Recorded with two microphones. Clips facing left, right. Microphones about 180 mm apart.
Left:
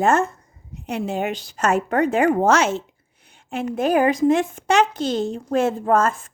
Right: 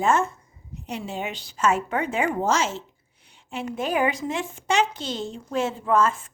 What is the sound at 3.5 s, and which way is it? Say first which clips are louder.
Speech: left 7 dB; 50° left (ahead or behind).